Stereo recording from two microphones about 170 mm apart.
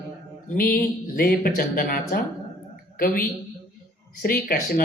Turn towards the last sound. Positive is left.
turn(degrees=60)  # may be behind; listen again after turning